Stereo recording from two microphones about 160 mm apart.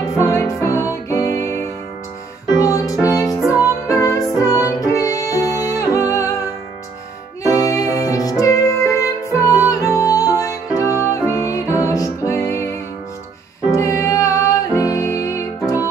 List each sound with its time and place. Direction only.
0.0 s music: 20° left (ahead or behind)
2.6 s music: 20° left (ahead or behind)
7.4 s music: 20° left (ahead or behind)